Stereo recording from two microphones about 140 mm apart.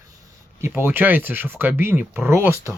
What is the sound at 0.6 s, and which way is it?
Speech, 15° right (ahead or behind).